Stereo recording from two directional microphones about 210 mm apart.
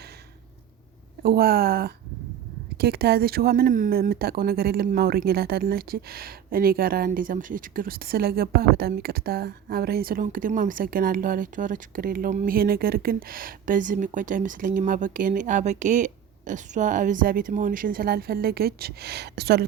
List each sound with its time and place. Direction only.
1.2 s speech: 45° right (ahead or behind)